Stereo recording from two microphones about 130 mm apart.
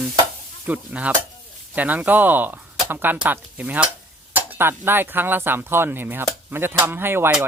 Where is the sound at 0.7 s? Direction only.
10° right (ahead or behind).